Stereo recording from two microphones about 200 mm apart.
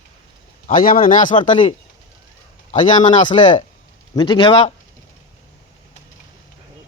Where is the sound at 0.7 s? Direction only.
45° left (ahead or behind).